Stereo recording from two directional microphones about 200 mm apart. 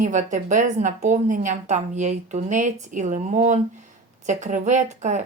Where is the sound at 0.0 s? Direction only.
40° right (ahead or behind).